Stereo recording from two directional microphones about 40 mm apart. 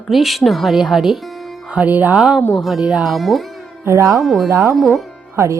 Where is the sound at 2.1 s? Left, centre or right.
Centre.